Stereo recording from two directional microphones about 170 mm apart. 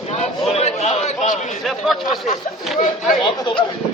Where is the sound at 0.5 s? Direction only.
40° left (ahead or behind).